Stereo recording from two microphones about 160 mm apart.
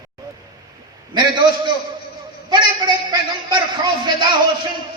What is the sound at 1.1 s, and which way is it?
Speech, 25° right (ahead or behind).